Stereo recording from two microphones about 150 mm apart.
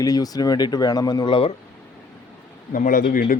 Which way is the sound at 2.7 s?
65° left (ahead or behind).